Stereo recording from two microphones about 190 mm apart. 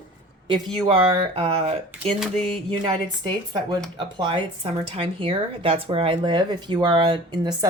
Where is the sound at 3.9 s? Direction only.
25° right (ahead or behind).